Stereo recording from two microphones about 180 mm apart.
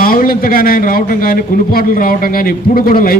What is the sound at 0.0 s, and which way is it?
A man's voice, 55° left (ahead or behind).